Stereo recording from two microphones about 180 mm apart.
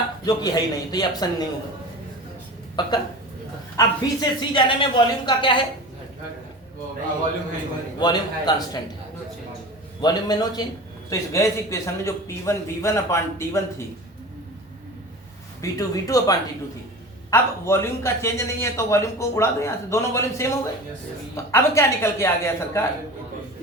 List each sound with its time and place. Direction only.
0.3 s speech: 20° left (ahead or behind)
2.8 s speech: 25° left (ahead or behind)
7.9 s speech: 25° left (ahead or behind)
10.0 s a man's voice: 20° left (ahead or behind)
15.6 s a man's voice: 20° left (ahead or behind)